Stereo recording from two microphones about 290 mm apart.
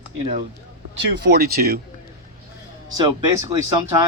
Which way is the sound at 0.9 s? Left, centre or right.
Right.